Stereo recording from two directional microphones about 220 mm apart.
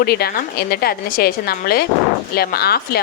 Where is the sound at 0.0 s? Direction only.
45° left (ahead or behind).